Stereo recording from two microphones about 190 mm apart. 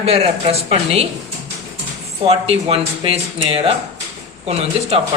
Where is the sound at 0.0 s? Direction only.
30° right (ahead or behind).